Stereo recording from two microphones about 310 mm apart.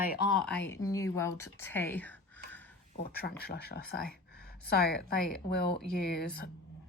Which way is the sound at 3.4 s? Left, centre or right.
Left.